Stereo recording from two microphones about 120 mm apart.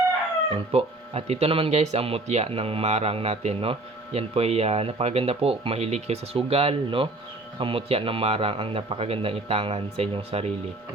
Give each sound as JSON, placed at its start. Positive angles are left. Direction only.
{"t": 0.5, "sound": "speech", "side_deg": -55}